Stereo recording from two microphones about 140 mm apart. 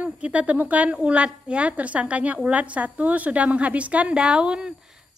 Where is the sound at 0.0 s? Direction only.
10° right (ahead or behind).